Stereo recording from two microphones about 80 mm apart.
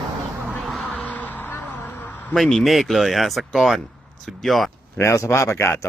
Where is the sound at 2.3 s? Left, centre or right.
Centre.